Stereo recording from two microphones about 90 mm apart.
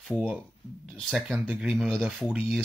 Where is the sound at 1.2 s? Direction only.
15° right (ahead or behind).